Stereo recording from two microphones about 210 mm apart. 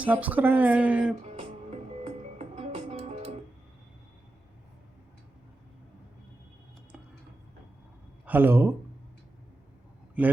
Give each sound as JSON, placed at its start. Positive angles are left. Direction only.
{"t": 0.0, "sound": "speech", "side_deg": -5}
{"t": 1.2, "sound": "music", "side_deg": -30}
{"t": 8.3, "sound": "speech", "side_deg": -10}